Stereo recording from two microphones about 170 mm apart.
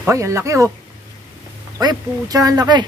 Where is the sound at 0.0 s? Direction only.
15° right (ahead or behind).